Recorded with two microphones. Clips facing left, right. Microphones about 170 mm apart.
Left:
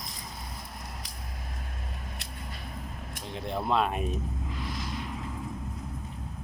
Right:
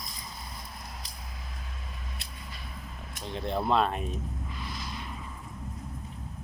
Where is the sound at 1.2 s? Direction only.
50° left (ahead or behind).